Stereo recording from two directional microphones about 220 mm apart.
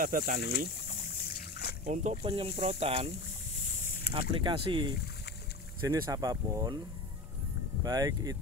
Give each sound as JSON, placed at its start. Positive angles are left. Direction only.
{"t": 0.0, "sound": "speech", "side_deg": -35}
{"t": 1.3, "sound": "boat", "side_deg": 45}
{"t": 1.9, "sound": "speech", "side_deg": -30}
{"t": 4.1, "sound": "speech", "side_deg": -25}
{"t": 7.8, "sound": "speech", "side_deg": -15}